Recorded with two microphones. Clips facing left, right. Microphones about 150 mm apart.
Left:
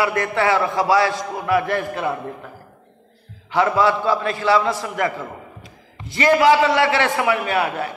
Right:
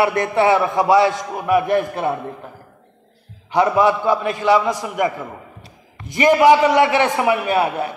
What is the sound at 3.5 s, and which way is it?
A man's voice, 15° right (ahead or behind).